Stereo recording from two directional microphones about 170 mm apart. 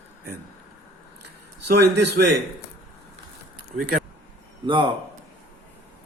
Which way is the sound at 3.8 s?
55° right (ahead or behind).